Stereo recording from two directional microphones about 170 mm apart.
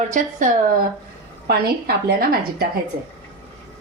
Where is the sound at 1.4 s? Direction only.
65° right (ahead or behind).